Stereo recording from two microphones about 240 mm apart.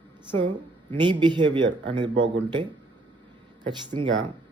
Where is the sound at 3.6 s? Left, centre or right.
Centre.